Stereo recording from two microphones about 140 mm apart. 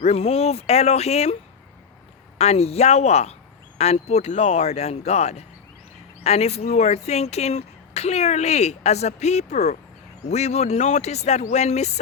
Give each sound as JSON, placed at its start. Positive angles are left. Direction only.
{"t": 0.0, "sound": "speech", "side_deg": 45}
{"t": 2.4, "sound": "speech", "side_deg": 50}